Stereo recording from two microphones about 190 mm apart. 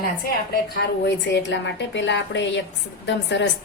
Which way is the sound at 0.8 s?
65° left (ahead or behind).